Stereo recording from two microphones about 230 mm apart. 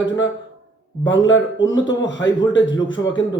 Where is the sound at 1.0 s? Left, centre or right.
Left.